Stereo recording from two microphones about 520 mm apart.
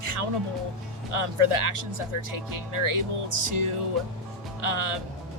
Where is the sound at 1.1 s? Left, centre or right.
Right.